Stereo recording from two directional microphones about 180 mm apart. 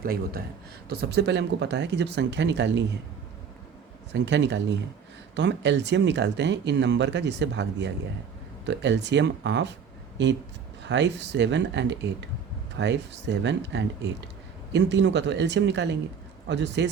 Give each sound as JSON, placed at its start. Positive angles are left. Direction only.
{"t": 0.0, "sound": "a man's voice", "side_deg": -55}
{"t": 0.9, "sound": "speech", "side_deg": -70}
{"t": 4.1, "sound": "speech", "side_deg": -75}
{"t": 10.8, "sound": "speech", "side_deg": -75}